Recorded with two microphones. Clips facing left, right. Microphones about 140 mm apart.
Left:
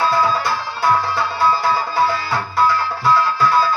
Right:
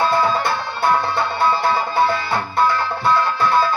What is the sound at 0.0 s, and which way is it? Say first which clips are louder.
Music: even; 25° right (ahead or behind).